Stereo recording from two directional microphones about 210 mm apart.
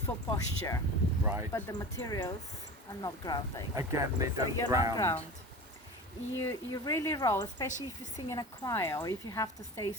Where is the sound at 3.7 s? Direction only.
15° right (ahead or behind).